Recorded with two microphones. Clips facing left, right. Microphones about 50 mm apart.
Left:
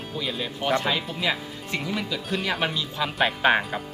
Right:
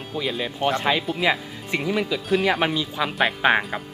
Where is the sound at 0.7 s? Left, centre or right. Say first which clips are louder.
Right 3 dB; right.